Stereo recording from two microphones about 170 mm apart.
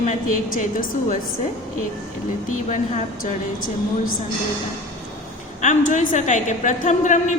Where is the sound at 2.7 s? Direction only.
50° left (ahead or behind).